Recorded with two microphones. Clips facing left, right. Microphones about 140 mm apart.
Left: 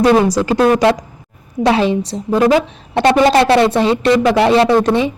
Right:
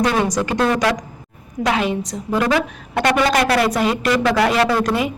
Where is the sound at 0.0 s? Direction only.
30° left (ahead or behind).